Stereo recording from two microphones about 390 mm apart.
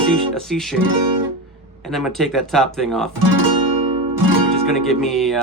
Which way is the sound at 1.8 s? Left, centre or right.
Centre.